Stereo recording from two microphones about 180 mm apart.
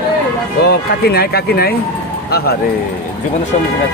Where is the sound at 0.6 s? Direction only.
65° left (ahead or behind).